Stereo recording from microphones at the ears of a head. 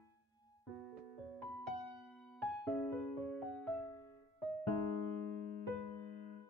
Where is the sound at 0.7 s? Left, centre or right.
Right.